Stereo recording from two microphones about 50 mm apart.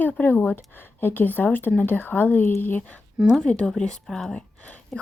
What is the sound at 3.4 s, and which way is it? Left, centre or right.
Speech, centre.